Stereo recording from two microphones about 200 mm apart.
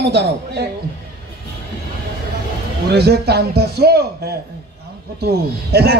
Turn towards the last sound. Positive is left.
turn(degrees=-55)  # may be behind; listen again after turning